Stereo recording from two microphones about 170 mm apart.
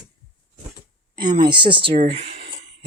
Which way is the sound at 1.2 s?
25° right (ahead or behind).